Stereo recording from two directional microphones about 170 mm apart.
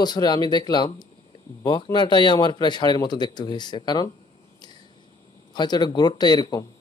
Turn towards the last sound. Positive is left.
turn(degrees=25)  # may be behind; listen again after turning